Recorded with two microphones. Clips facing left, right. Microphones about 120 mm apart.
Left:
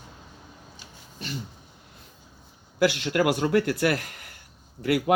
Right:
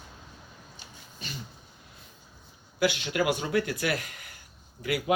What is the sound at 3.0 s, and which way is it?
Speech, 65° left (ahead or behind).